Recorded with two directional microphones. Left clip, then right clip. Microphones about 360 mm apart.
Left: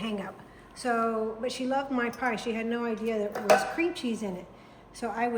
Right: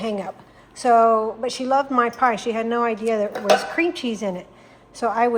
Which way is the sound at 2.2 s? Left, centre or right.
Right.